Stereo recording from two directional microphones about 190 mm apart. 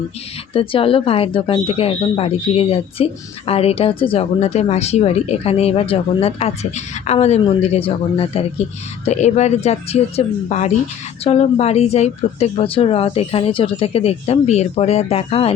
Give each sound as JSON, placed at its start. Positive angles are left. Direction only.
{"t": 0.5, "sound": "speech", "side_deg": 30}